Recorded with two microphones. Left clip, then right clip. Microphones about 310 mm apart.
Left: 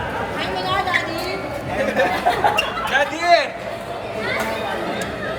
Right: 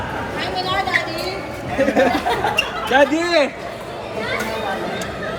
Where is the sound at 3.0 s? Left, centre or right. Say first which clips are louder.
Even; centre.